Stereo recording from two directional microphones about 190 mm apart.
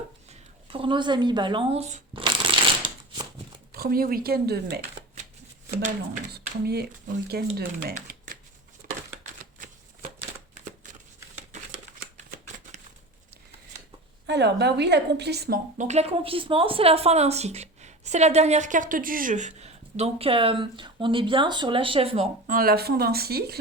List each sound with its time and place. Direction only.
0.3 s a sound: 30° right (ahead or behind)
3.7 s speech: 50° right (ahead or behind)
7.3 s speech: 55° right (ahead or behind)
8.8 s a sound: 45° right (ahead or behind)
9.2 s shuffling cards: 45° right (ahead or behind)
14.3 s a woman's voice: 65° right (ahead or behind); by 22.3 s 30° right (ahead or behind)
22.4 s speech: 50° right (ahead or behind)